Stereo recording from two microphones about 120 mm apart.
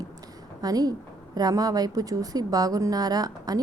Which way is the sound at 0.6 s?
30° right (ahead or behind).